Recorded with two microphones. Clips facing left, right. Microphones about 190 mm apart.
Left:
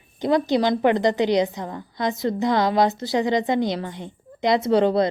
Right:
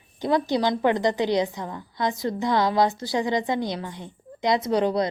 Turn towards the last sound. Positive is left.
turn(degrees=25)  # may be behind; listen again after turning